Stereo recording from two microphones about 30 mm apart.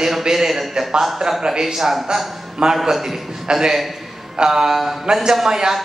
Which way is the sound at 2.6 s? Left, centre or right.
Right.